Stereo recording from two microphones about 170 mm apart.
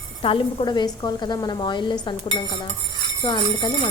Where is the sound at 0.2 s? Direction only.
30° left (ahead or behind).